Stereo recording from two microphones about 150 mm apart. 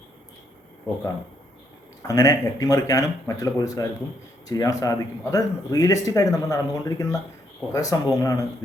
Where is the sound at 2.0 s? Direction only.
25° left (ahead or behind).